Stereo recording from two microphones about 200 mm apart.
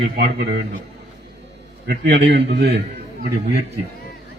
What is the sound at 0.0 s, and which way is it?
Speech, 55° right (ahead or behind).